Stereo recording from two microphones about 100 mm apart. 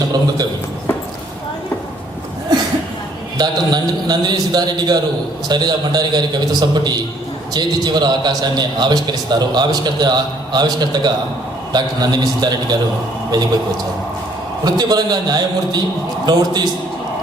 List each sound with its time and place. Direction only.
2.5 s a sound: 45° right (ahead or behind)
3.3 s a man's voice: 45° right (ahead or behind)
14.6 s a man's voice: 40° right (ahead or behind)